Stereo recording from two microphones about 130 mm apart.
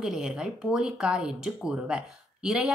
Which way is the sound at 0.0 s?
5° right (ahead or behind).